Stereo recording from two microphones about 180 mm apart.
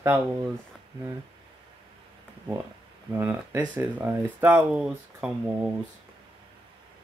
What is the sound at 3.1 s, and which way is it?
Speech, 15° right (ahead or behind).